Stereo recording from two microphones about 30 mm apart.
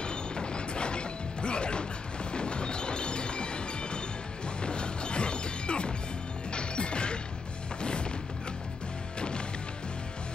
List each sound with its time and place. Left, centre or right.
0.0 s mechanisms: left
2.3 s train: left
4.6 s music: left